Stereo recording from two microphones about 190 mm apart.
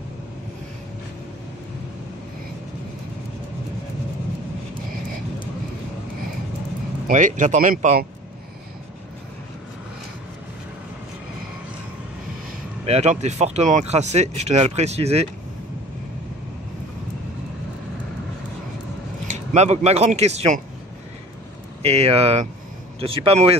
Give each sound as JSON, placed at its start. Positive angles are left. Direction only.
{"t": 7.1, "sound": "speech", "side_deg": -40}
{"t": 12.8, "sound": "speech", "side_deg": -35}
{"t": 19.2, "sound": "speech", "side_deg": -35}
{"t": 21.8, "sound": "speech", "side_deg": -30}